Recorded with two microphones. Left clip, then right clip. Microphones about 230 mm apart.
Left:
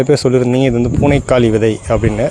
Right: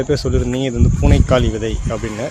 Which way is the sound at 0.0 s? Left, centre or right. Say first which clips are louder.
Left 7 dB; left.